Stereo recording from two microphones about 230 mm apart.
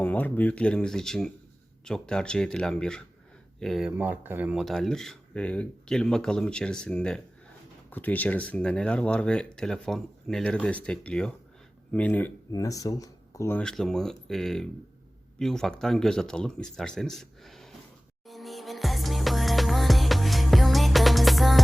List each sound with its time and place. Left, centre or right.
0.0 s speech: centre
18.3 s music: centre